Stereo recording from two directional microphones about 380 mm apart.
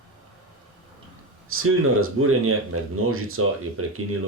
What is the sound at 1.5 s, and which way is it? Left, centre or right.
Speech, right.